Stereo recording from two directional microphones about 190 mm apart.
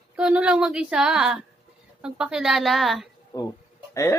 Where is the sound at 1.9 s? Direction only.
5° right (ahead or behind).